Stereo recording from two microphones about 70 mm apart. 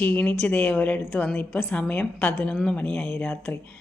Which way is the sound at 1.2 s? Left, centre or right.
Left.